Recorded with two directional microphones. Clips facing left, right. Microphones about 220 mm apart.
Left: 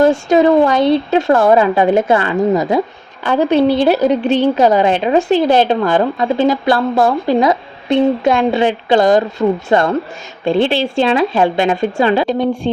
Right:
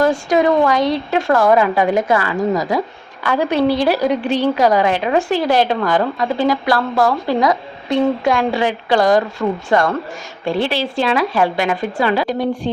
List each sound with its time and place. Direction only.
0.0 s a woman's voice: 25° left (ahead or behind)